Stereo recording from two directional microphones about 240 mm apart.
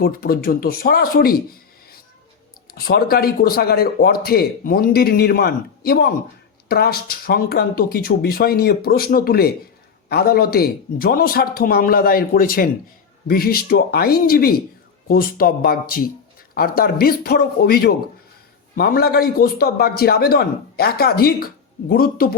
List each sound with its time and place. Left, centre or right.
0.0 s a man's voice: left
2.7 s a man's voice: left